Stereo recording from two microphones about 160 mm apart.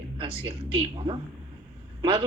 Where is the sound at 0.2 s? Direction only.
30° right (ahead or behind).